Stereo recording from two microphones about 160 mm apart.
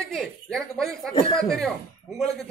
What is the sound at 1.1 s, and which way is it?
Speech, 35° left (ahead or behind).